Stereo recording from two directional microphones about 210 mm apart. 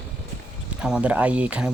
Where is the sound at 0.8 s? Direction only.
5° right (ahead or behind).